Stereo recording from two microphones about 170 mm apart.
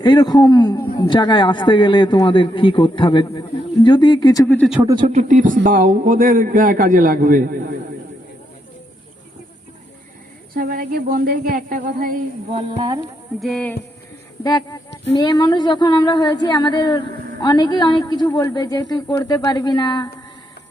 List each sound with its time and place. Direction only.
0.0 s a man's voice: 25° left (ahead or behind)
4.4 s speech: 10° left (ahead or behind)
5.0 s a man's voice: 45° right (ahead or behind)
10.5 s speech: 60° right (ahead or behind)
12.5 s speech: 25° right (ahead or behind)
13.4 s a sound: 5° left (ahead or behind)
14.4 s a man's voice: 25° left (ahead or behind)